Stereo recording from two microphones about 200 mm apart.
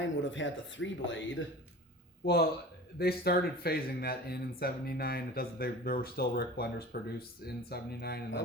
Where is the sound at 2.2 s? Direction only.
50° left (ahead or behind).